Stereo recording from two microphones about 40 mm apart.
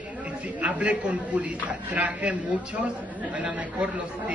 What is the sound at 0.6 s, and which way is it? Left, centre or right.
A man's voice, right.